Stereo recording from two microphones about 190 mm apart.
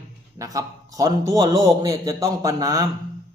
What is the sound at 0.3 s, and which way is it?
A man's voice, 20° right (ahead or behind).